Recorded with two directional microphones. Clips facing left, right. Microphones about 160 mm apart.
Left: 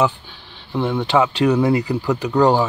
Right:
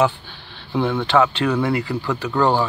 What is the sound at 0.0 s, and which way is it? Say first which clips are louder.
Speech: even; centre (ahead or behind).